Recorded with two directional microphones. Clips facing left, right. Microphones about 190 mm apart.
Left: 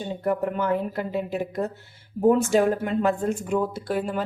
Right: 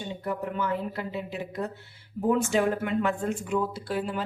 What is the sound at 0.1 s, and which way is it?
A woman's voice, 50° left (ahead or behind).